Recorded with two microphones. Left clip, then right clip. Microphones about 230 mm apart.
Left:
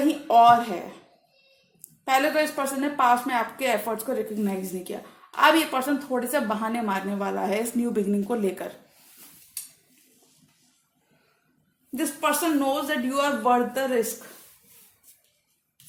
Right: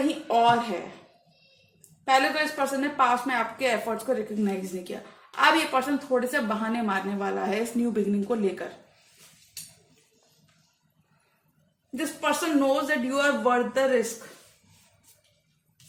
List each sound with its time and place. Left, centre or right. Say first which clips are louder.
0.3 s speech: left 5 dB; left
2.0 s a woman's voice: left 1 dB; left
11.9 s speech: left 2 dB; left